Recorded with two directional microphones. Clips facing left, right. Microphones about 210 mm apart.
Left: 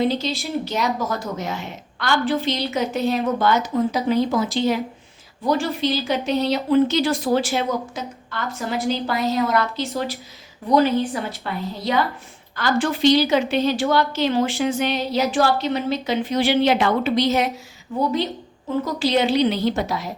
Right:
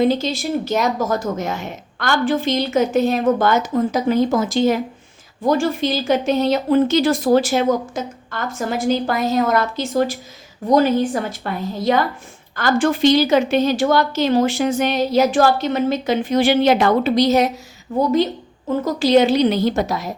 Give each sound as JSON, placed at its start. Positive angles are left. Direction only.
{"t": 0.0, "sound": "a woman's voice", "side_deg": -50}
{"t": 18.9, "sound": "a woman's voice", "side_deg": -45}